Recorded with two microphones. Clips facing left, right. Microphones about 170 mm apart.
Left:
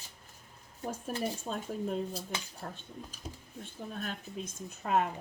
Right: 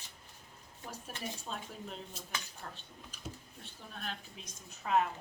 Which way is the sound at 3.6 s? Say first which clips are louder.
Left 6 dB; 50° left (ahead or behind).